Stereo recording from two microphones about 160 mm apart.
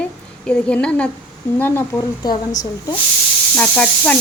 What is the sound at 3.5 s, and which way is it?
Speech, 5° left (ahead or behind).